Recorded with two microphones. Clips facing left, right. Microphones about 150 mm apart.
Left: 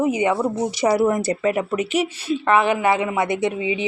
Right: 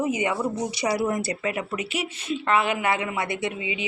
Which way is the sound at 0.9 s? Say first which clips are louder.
Left 6 dB; 45° left (ahead or behind).